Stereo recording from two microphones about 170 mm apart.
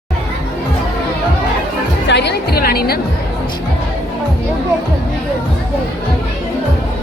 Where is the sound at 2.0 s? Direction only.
80° left; by 3.0 s 65° left (ahead or behind).